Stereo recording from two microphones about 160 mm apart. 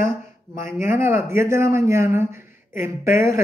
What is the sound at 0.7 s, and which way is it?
Speech, 15° right (ahead or behind).